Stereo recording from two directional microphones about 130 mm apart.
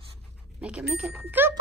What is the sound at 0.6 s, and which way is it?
Speech, 10° right (ahead or behind).